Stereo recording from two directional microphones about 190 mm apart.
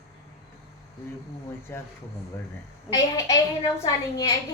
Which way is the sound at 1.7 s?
15° left (ahead or behind).